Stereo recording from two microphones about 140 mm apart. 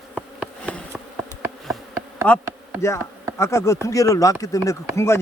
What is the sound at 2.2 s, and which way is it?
Speech, 10° left (ahead or behind).